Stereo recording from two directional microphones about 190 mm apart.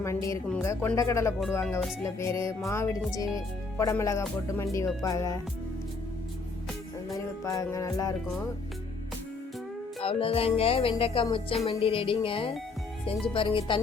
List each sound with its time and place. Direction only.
0.0 s a woman's voice: 15° left (ahead or behind)
7.4 s a woman's voice: 15° left (ahead or behind)
10.0 s music: 30° left (ahead or behind)